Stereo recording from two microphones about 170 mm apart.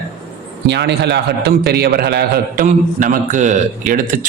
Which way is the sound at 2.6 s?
50° right (ahead or behind).